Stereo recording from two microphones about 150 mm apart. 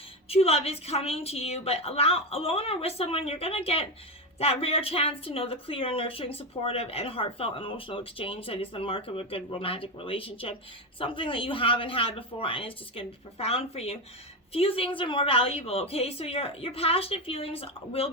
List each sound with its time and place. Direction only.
0.3 s speech: 40° left (ahead or behind)